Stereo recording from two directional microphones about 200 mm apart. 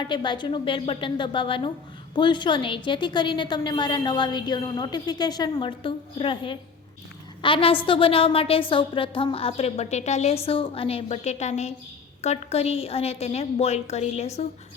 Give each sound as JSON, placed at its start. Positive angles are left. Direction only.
{"t": 0.0, "sound": "a woman's voice", "side_deg": 25}